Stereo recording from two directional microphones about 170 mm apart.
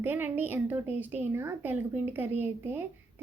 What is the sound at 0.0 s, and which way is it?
A woman's voice, 10° right (ahead or behind).